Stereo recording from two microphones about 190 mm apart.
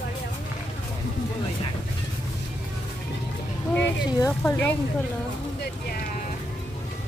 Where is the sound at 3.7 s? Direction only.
10° left (ahead or behind).